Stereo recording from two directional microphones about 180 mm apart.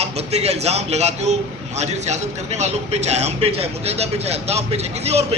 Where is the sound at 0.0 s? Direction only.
35° right (ahead or behind).